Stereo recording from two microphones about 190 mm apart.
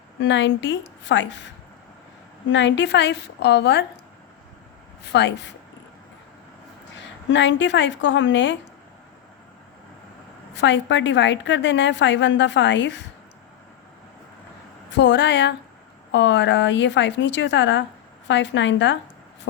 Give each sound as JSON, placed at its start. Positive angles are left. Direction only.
{"t": 0.2, "sound": "a woman's voice", "side_deg": 70}
{"t": 5.1, "sound": "a woman's voice", "side_deg": 65}
{"t": 6.9, "sound": "a woman's voice", "side_deg": 70}
{"t": 10.5, "sound": "a woman's voice", "side_deg": 70}
{"t": 14.9, "sound": "a woman's voice", "side_deg": 65}